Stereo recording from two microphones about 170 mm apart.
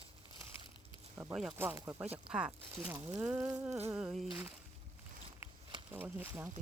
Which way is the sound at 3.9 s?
5° right (ahead or behind).